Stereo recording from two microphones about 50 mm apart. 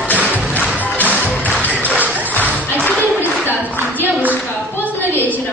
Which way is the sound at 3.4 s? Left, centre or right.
Right.